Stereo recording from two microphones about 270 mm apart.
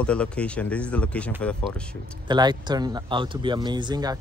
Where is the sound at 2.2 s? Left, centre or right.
Centre.